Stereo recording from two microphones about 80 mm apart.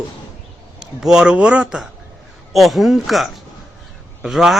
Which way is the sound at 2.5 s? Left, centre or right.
Centre.